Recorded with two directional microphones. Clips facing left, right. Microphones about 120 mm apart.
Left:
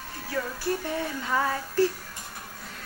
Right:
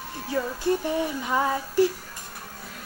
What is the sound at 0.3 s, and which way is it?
Music, 20° right (ahead or behind).